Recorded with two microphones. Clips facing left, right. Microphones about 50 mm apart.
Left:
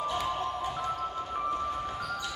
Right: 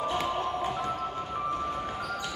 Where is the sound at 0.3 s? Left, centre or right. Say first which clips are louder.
Right 2 dB; right.